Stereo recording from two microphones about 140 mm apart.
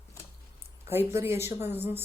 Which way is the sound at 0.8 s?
15° right (ahead or behind).